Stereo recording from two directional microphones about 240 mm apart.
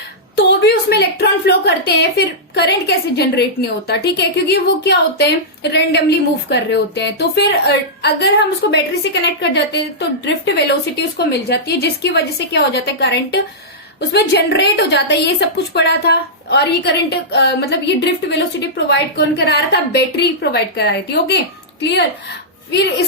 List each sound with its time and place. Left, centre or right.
0.3 s a woman's voice: left